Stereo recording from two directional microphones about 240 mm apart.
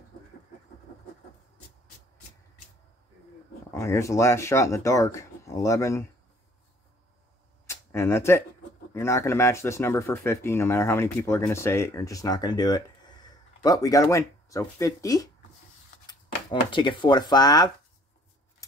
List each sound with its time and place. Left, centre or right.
3.7 s speech: centre
7.6 s a sound: centre
8.9 s speech: centre